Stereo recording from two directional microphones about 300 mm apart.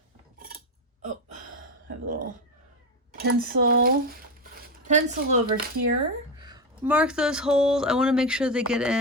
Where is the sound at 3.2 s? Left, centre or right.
Right.